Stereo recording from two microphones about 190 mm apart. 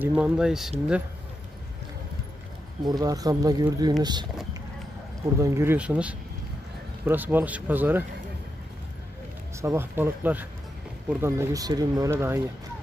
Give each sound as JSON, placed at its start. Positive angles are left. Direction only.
{"t": 0.0, "sound": "speech", "side_deg": -5}
{"t": 2.8, "sound": "speech", "side_deg": -20}
{"t": 5.4, "sound": "speech", "side_deg": -15}
{"t": 9.6, "sound": "speech", "side_deg": -15}